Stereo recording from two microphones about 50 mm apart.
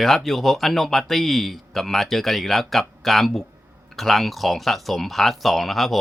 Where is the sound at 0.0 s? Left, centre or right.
Centre.